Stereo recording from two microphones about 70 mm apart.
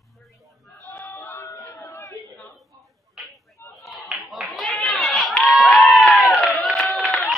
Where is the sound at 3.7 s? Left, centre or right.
Centre.